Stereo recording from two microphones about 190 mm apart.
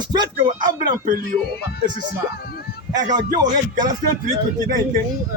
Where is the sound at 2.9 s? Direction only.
20° right (ahead or behind).